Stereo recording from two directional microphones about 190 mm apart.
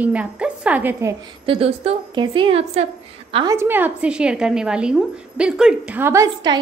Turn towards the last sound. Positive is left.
turn(degrees=-20)  # may be behind; listen again after turning